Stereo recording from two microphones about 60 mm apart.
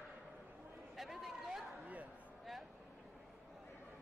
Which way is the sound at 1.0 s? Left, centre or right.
Centre.